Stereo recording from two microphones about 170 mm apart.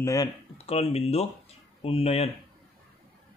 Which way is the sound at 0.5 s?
35° left (ahead or behind).